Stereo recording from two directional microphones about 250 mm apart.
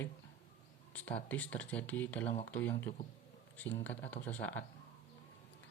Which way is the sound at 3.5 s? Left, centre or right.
Centre.